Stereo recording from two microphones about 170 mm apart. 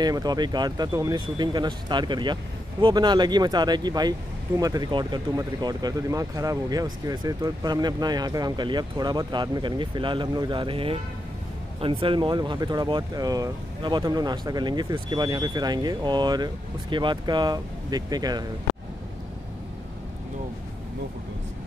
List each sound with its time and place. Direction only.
0.0 s speech: 25° right (ahead or behind)